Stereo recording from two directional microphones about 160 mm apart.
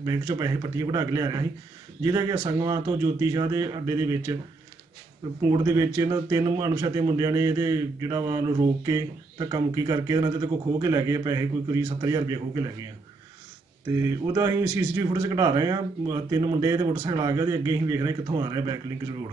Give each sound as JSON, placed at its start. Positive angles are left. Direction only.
{"t": 0.0, "sound": "a man's voice", "side_deg": -25}
{"t": 5.8, "sound": "a man's voice", "side_deg": -20}
{"t": 14.3, "sound": "a man's voice", "side_deg": -20}